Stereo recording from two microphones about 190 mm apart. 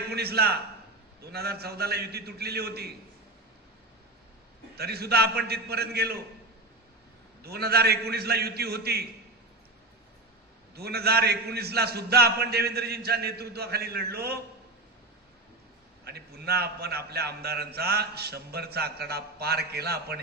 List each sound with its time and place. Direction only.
0.1 s a man's voice: 55° right (ahead or behind)
4.7 s a man's voice: 55° right (ahead or behind)
7.4 s a man's voice: 55° right (ahead or behind)
10.8 s a man's voice: 55° right (ahead or behind)
16.0 s a man's voice: 55° right (ahead or behind)